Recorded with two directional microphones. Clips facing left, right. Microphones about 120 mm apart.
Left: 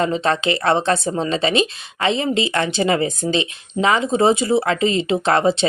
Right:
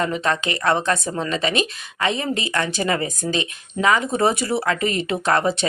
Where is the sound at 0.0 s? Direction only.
30° left (ahead or behind).